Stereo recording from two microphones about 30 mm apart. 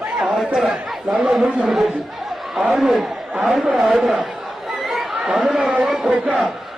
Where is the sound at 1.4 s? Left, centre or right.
Right.